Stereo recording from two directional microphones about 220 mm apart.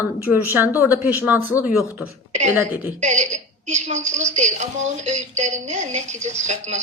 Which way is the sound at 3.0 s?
30° right (ahead or behind).